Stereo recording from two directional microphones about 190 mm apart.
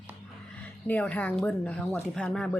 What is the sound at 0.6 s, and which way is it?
Speech, 5° left (ahead or behind).